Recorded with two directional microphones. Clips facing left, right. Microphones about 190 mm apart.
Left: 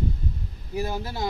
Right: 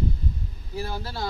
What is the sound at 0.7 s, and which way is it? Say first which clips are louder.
Speech: left 3 dB; 20° left (ahead or behind).